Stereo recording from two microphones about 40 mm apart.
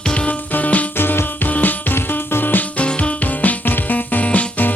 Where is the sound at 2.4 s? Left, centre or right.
Left.